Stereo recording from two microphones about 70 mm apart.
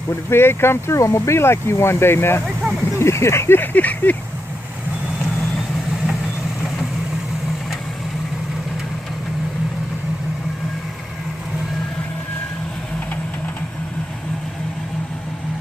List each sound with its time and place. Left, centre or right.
0.3 s speech: left